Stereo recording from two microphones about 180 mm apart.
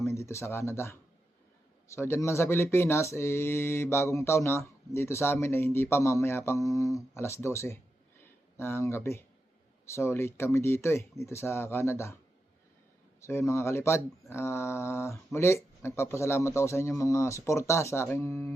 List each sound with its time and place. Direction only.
0.0 s speech: 15° left (ahead or behind)
13.2 s speech: 15° left (ahead or behind)